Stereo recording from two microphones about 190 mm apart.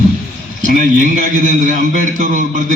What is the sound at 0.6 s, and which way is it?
A man's voice, 40° right (ahead or behind).